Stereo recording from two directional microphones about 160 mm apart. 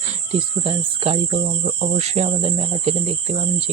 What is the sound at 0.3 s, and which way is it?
Cricket, 35° right (ahead or behind).